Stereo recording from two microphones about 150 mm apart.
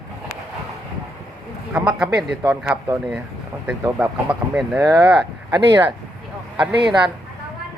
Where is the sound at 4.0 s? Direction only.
10° right (ahead or behind).